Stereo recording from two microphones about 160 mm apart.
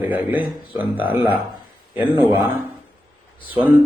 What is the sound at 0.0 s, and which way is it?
A man's voice, 10° right (ahead or behind).